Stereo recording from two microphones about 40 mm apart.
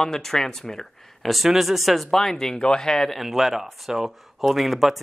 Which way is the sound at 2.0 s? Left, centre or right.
Centre.